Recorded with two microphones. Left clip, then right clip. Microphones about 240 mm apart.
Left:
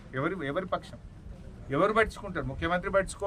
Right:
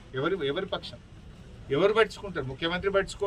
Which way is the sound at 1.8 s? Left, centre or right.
Centre.